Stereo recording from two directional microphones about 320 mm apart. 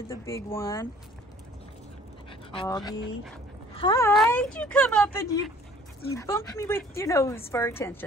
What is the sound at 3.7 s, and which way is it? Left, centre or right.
A woman's voice, centre.